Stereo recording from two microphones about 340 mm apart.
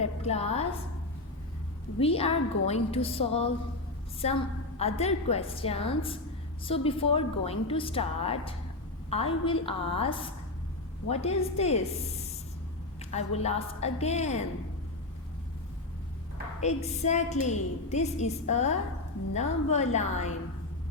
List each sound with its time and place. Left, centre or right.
0.0 s a woman's voice: centre
2.0 s a woman's voice: centre
13.1 s a woman's voice: centre
16.6 s a woman's voice: centre